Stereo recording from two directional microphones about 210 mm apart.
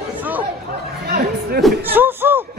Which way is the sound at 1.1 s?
45° right (ahead or behind).